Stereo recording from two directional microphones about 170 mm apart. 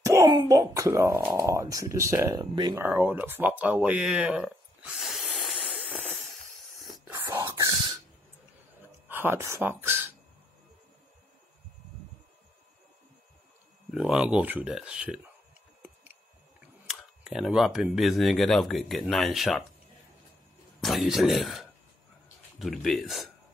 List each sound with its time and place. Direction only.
0.0 s speech: 20° right (ahead or behind)
2.3 s speech: 25° right (ahead or behind)
2.8 s speech: 10° right (ahead or behind); by 6.3 s 5° left (ahead or behind)
7.1 s a sound: 15° right (ahead or behind)
8.8 s speech: 10° right (ahead or behind)
13.9 s speech: 5° right (ahead or behind)
16.8 s speech: centre (ahead or behind)
20.8 s speech: centre (ahead or behind)